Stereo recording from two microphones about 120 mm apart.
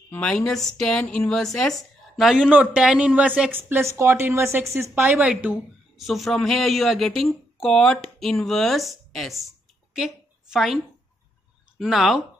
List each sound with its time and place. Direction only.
0.1 s a woman's voice: 10° left (ahead or behind)
10.5 s speech: centre (ahead or behind)
11.8 s speech: centre (ahead or behind)